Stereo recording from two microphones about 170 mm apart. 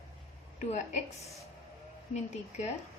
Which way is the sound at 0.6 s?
45° left (ahead or behind).